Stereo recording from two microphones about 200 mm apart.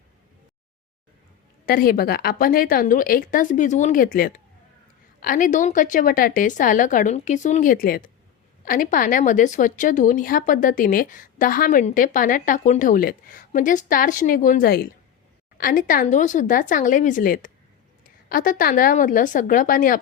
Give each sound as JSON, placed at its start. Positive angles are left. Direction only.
{"t": 1.6, "sound": "a woman's voice", "side_deg": 45}